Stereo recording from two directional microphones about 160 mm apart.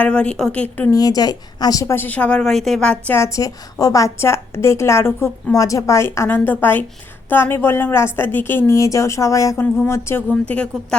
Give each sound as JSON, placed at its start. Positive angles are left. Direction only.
{"t": 0.0, "sound": "a woman's voice", "side_deg": 5}
{"t": 0.9, "sound": "a woman's voice", "side_deg": 25}